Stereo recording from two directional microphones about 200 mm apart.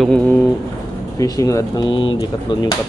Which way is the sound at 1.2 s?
15° left (ahead or behind).